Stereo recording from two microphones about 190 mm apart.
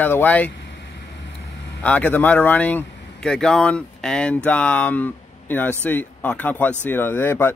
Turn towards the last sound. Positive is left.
turn(degrees=10)  # may be behind; listen again after turning